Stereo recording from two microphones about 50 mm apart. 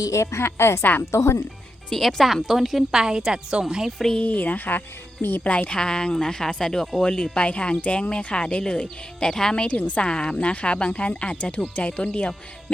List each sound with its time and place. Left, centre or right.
0.1 s a woman's voice: left
0.4 s a woman's voice: left
1.1 s speech: left
2.0 s a woman's voice: centre
3.0 s a woman's voice: centre
3.9 s speech: centre
4.2 s speech: left
5.4 s speech: left
9.6 s speech: left
10.1 s speech: centre